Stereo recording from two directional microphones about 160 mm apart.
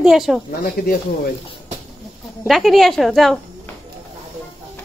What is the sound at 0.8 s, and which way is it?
Speech, 75° left (ahead or behind).